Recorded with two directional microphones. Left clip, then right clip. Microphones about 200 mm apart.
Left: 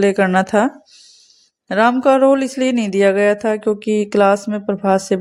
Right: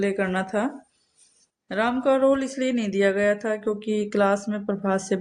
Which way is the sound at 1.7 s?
40° left (ahead or behind).